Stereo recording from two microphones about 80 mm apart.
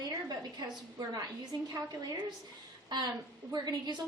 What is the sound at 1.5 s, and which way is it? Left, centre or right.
Speech, right.